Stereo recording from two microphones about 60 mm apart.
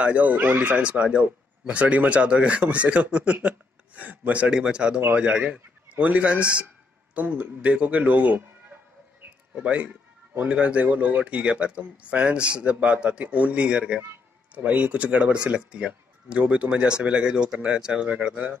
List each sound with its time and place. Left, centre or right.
0.0 s a man's voice: right
9.6 s a man's voice: right